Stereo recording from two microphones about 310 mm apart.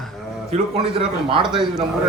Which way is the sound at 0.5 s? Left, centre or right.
Centre.